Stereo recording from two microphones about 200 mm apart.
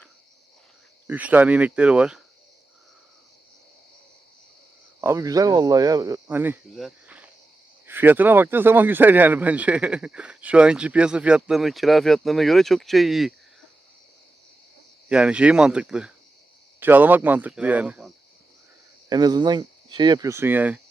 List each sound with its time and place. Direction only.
1.0 s speech: 10° right (ahead or behind)
4.9 s speech: 15° right (ahead or behind)
15.1 s speech: 5° right (ahead or behind)
19.0 s speech: 20° right (ahead or behind)